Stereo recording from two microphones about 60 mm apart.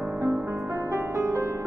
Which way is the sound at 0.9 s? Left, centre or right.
Right.